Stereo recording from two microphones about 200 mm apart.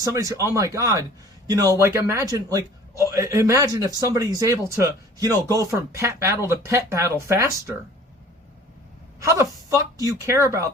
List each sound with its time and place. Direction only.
0.0 s a man's voice: 15° right (ahead or behind)
9.2 s a man's voice: 15° right (ahead or behind)